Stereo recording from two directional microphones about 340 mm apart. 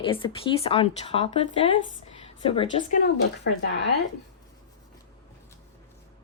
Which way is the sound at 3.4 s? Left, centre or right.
Left.